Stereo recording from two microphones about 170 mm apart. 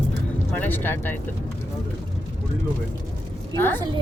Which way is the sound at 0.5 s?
10° left (ahead or behind).